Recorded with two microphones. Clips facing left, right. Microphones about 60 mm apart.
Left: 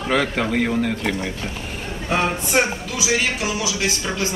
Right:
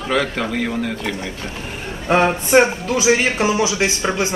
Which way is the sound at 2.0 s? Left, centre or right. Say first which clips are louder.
Right 6 dB; right.